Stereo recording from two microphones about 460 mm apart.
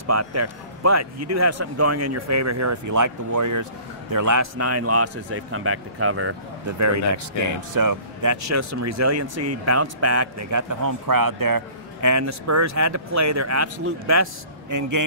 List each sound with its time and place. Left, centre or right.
0.0 s speech: right
7.7 s speech: right